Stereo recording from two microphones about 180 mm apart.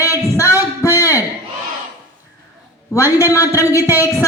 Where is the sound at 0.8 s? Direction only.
15° left (ahead or behind).